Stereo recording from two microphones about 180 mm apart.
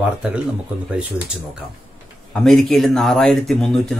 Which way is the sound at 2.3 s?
Centre (ahead or behind).